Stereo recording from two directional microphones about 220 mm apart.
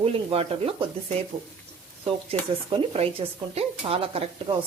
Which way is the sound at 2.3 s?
25° right (ahead or behind).